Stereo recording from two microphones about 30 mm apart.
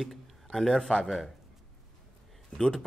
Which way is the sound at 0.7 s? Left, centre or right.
Left.